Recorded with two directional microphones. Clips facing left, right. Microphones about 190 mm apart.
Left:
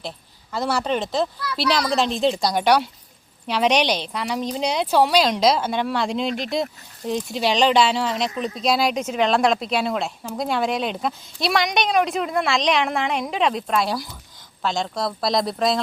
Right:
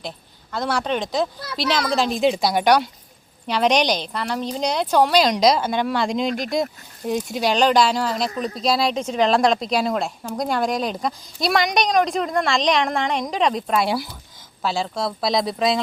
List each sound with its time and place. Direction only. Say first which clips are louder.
0.5 s a woman's voice: even; 5° left (ahead or behind)
8.3 s speech: right 1 dB; 35° right (ahead or behind)
8.6 s a woman's voice: even; centre (ahead or behind)